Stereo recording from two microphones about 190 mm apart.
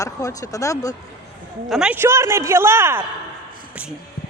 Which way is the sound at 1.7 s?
5° right (ahead or behind).